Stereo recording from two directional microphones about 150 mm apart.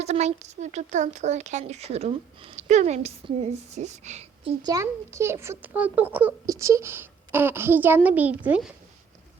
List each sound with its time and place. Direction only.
0.0 s a woman's voice: 45° right (ahead or behind)
4.6 s a woman's voice: 20° right (ahead or behind)